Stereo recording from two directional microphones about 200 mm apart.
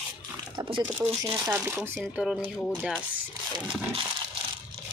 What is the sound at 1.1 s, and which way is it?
Speech, 25° right (ahead or behind).